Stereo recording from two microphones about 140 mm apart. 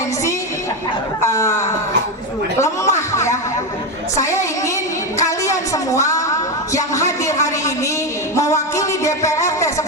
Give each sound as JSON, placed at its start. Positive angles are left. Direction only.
{"t": 1.2, "sound": "a woman's voice", "side_deg": 20}
{"t": 5.2, "sound": "a sound", "side_deg": 25}
{"t": 8.4, "sound": "music", "side_deg": 20}